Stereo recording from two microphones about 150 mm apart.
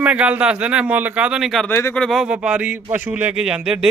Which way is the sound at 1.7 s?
15° left (ahead or behind).